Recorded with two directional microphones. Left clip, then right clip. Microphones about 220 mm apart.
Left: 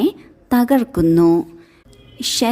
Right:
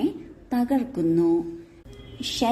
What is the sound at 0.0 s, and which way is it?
A woman's voice, 45° left (ahead or behind).